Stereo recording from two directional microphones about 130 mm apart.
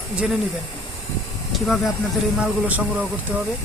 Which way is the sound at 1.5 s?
Centre (ahead or behind).